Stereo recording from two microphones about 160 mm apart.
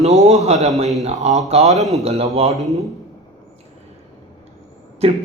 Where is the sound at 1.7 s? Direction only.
Centre (ahead or behind).